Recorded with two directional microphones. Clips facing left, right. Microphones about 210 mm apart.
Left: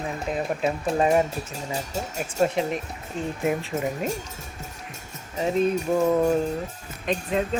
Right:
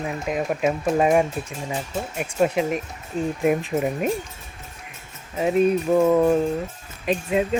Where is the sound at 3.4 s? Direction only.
20° right (ahead or behind).